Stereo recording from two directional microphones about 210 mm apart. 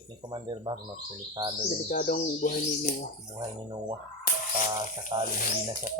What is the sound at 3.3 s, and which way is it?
Speech, 20° right (ahead or behind).